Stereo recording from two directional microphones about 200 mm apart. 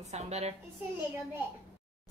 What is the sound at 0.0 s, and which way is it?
Speech, 35° right (ahead or behind).